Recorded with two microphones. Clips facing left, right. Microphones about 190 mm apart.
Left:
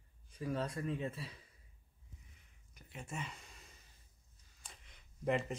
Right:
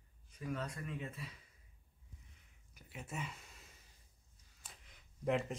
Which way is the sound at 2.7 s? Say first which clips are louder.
Even; 5° right (ahead or behind).